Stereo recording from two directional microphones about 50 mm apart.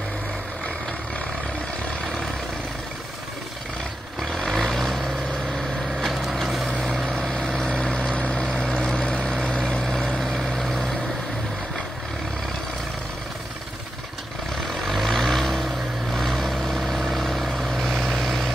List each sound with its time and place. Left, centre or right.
4.2 s vehicle: centre
5.9 s wood: centre
7.1 s vehicle: centre
9.9 s vehicle: centre
14.9 s vehicle: centre